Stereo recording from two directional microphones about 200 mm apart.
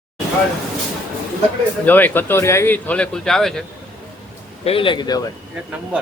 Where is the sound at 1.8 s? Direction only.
10° left (ahead or behind).